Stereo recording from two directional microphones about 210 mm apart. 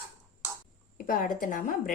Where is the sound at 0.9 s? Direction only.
40° left (ahead or behind).